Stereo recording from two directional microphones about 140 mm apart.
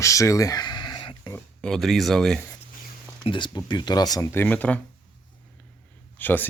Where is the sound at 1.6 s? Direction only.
5° left (ahead or behind).